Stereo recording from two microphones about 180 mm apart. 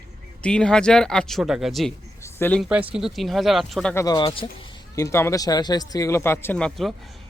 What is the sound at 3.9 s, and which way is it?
Speech, 20° left (ahead or behind).